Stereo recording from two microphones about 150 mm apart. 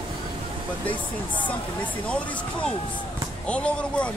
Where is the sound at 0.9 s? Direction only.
35° left (ahead or behind).